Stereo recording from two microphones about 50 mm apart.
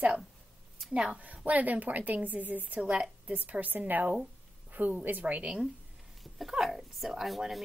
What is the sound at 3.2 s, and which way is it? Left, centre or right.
A woman's voice, right.